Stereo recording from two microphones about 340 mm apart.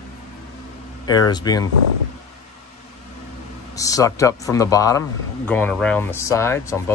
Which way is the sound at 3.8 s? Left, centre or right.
Centre.